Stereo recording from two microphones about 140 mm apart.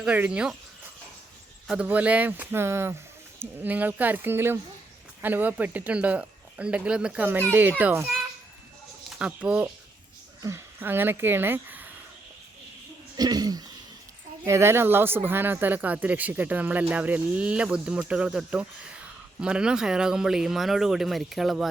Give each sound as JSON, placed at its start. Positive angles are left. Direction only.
{"t": 0.0, "sound": "speech", "side_deg": -10}
{"t": 1.6, "sound": "speech", "side_deg": -10}
{"t": 13.1, "sound": "speech", "side_deg": -30}